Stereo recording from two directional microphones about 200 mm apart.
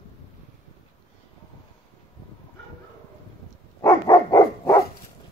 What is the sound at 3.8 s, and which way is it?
Dog, 15° left (ahead or behind).